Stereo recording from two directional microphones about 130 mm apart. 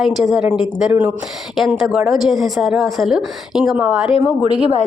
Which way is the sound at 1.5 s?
Centre (ahead or behind).